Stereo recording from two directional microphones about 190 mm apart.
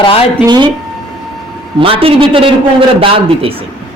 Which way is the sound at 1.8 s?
30° right (ahead or behind).